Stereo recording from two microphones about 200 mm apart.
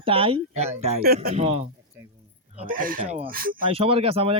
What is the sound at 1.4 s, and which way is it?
Speech, 30° right (ahead or behind).